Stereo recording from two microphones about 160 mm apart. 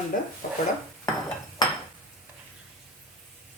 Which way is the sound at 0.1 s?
60° left (ahead or behind).